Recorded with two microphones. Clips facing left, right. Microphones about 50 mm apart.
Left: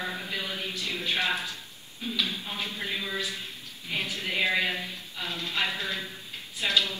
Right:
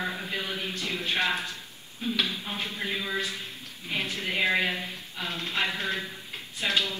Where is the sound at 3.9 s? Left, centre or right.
Right.